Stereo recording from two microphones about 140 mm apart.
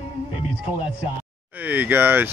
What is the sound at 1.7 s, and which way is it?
Speech, 15° right (ahead or behind).